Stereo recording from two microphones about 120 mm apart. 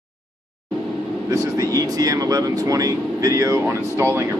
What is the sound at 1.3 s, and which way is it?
Speech, 30° right (ahead or behind).